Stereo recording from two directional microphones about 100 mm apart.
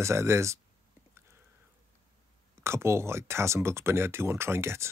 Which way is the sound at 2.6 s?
25° right (ahead or behind).